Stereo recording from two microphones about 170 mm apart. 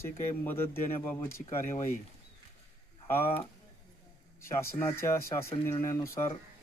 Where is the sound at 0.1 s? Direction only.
15° left (ahead or behind).